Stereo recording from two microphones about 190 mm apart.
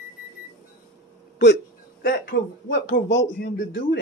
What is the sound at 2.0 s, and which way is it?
Speech, 55° left (ahead or behind).